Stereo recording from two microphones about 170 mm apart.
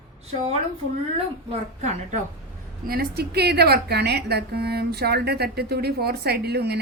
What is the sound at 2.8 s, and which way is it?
A woman's voice, 65° right (ahead or behind).